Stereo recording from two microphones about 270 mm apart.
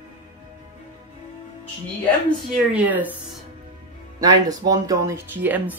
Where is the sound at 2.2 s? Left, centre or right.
Centre.